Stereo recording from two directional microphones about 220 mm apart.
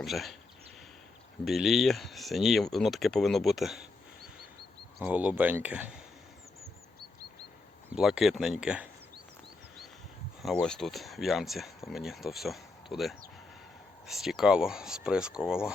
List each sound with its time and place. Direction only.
0.0 s speech: centre (ahead or behind)
1.5 s speech: centre (ahead or behind)
4.9 s speech: 5° right (ahead or behind)
7.9 s speech: 5° right (ahead or behind)
10.4 s speech: 5° left (ahead or behind)